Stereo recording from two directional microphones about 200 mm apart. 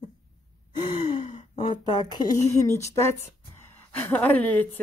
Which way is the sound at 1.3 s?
25° left (ahead or behind).